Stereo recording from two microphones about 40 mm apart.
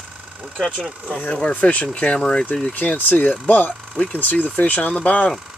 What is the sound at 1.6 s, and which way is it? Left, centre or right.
Speech, left.